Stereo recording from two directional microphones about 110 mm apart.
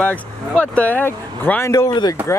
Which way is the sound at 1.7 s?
35° left (ahead or behind).